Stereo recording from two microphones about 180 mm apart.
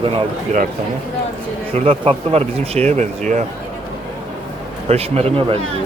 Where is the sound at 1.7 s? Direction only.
30° right (ahead or behind).